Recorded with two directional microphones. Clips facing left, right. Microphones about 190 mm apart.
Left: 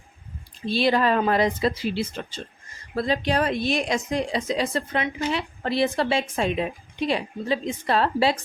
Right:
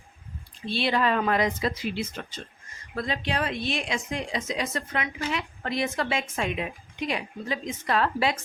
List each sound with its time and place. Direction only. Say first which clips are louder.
0.6 s speech: left 4 dB; 40° left (ahead or behind)